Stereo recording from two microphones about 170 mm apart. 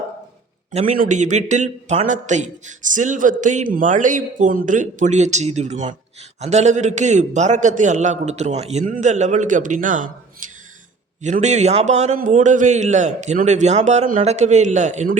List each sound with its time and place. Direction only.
0.7 s a man's voice: 40° right (ahead or behind)